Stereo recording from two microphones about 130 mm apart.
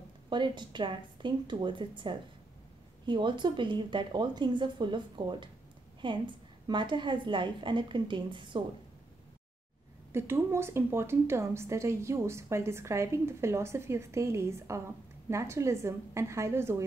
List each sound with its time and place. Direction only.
0.3 s a woman's voice: 35° right (ahead or behind)
10.1 s a woman's voice: 20° right (ahead or behind)